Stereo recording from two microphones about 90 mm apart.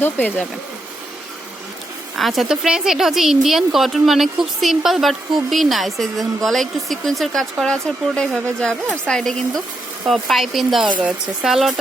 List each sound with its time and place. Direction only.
0.0 s speech: 20° left (ahead or behind)
2.1 s speech: centre (ahead or behind)